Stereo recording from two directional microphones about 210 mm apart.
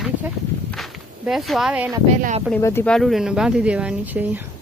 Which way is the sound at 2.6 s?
10° left (ahead or behind).